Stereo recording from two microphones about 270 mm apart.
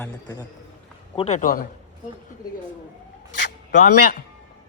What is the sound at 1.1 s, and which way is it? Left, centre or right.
Speech, left.